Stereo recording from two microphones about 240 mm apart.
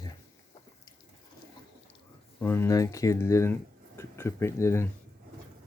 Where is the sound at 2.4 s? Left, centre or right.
Centre.